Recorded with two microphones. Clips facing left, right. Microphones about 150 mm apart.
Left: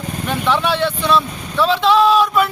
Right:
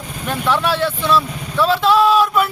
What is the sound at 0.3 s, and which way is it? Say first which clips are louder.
Speech: even; 5° right (ahead or behind).